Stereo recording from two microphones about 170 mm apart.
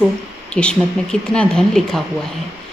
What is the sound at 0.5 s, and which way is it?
A woman's voice, 5° left (ahead or behind).